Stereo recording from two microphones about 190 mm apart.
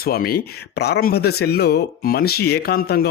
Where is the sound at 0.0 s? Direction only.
50° left (ahead or behind).